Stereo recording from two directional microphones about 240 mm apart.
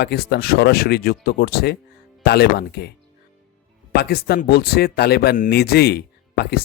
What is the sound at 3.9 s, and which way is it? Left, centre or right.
Speech, left.